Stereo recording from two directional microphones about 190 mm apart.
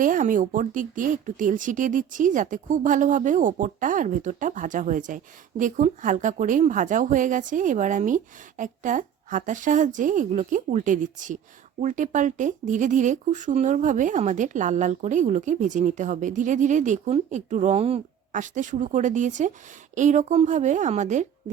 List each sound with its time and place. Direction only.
0.0 s speech: 45° right (ahead or behind)